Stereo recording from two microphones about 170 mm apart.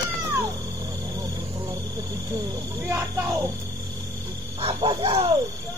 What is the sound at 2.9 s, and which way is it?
Speech, 20° right (ahead or behind).